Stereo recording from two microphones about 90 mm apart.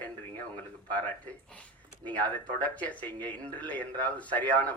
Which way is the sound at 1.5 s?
15° left (ahead or behind).